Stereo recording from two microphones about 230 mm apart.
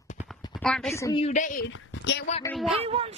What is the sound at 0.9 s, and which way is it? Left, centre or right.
Speech, centre.